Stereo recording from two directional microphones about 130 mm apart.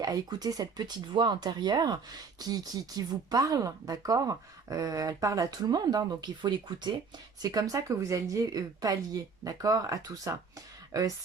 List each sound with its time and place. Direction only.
0.0 s speech: 30° right (ahead or behind)